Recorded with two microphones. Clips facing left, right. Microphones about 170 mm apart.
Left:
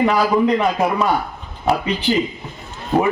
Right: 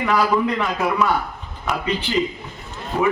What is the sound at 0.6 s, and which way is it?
Speech, 30° left (ahead or behind).